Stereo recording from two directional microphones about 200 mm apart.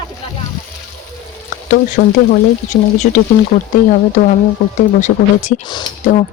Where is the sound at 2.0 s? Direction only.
45° left (ahead or behind).